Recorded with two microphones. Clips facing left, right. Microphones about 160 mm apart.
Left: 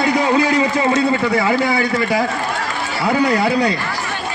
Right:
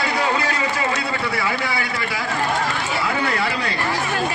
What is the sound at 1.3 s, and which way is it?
A man's voice, 45° left (ahead or behind).